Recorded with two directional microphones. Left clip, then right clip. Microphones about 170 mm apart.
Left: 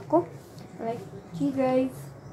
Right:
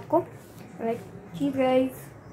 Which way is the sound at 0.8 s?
20° left (ahead or behind).